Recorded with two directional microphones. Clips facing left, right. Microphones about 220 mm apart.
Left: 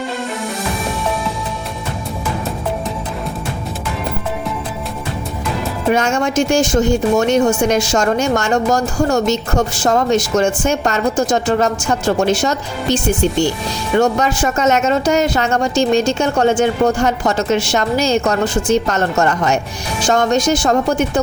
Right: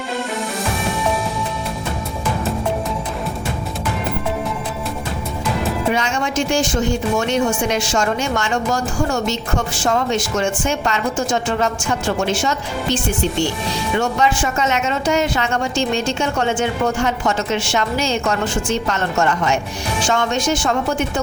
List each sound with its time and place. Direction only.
5.9 s a woman's voice: 45° left (ahead or behind)